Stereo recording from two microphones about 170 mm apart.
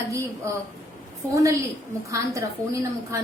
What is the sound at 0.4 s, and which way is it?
Speech, 15° right (ahead or behind).